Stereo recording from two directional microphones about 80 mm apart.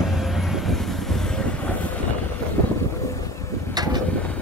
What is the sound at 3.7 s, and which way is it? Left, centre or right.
Vehicle, right.